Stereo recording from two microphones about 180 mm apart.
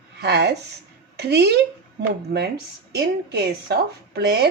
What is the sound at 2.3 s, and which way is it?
Speech, 55° right (ahead or behind).